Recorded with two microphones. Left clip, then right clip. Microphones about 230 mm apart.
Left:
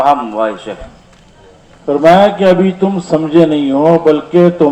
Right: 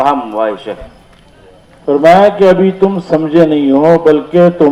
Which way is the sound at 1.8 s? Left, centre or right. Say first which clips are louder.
Right 1 dB; right.